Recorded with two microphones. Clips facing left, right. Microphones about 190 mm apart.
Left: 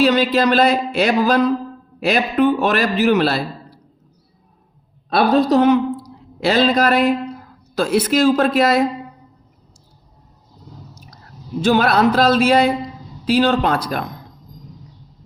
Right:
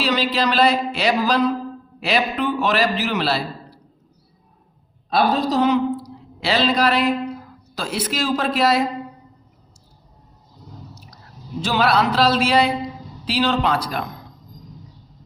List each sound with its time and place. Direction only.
0.0 s a man's voice: 50° left (ahead or behind)
5.0 s a woman's voice: 60° left (ahead or behind)
11.6 s a man's voice: 50° left (ahead or behind)